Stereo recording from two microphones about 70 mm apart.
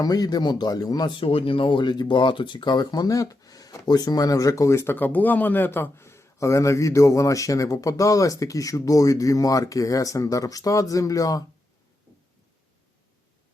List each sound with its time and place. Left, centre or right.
0.0 s speech: left
1.8 s speech: left
3.1 s speech: left
4.9 s a man's voice: left